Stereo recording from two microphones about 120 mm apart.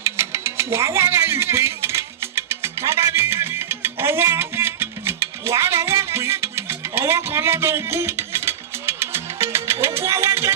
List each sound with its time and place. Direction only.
0.0 s music: 20° right (ahead or behind)